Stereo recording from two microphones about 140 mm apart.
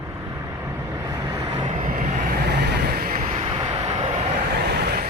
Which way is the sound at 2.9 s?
90° right.